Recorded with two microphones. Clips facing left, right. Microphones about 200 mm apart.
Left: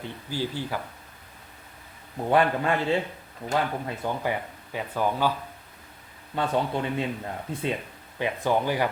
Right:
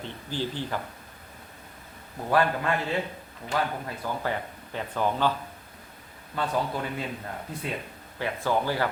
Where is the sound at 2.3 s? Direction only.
25° left (ahead or behind).